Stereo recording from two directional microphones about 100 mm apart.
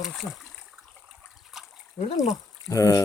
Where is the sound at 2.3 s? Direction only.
35° left (ahead or behind).